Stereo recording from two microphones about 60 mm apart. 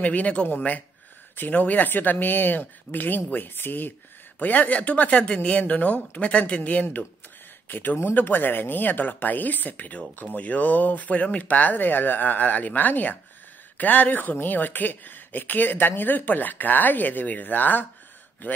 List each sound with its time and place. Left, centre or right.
0.0 s speech: left